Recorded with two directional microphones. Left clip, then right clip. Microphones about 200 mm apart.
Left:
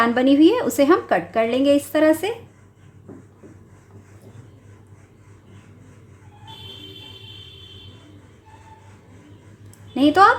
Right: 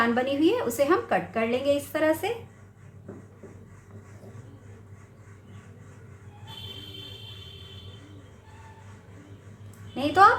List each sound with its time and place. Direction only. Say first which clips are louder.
0.0 s a woman's voice: left 8 dB; 45° left (ahead or behind)
9.9 s a woman's voice: left 5 dB; 45° left (ahead or behind)